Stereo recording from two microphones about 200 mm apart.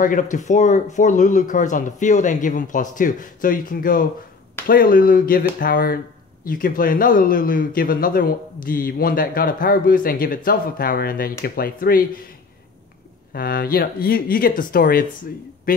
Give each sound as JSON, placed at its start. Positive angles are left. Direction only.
{"t": 0.0, "sound": "speech", "side_deg": 40}
{"t": 13.3, "sound": "speech", "side_deg": 50}